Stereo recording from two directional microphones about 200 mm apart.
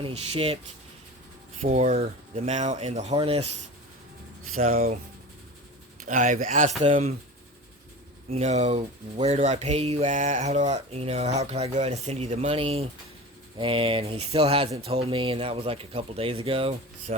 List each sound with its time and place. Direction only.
0.0 s speech: 30° right (ahead or behind)
1.6 s speech: 40° right (ahead or behind)
4.5 s speech: 30° right (ahead or behind)
6.1 s speech: 40° right (ahead or behind)
8.3 s speech: 35° right (ahead or behind)